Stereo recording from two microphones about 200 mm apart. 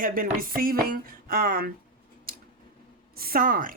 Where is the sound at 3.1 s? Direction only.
50° right (ahead or behind).